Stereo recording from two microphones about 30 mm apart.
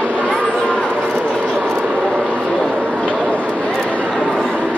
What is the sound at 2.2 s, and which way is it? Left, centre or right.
Vehicle, right.